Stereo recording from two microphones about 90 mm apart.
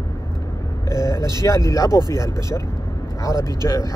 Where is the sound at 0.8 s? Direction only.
35° left (ahead or behind).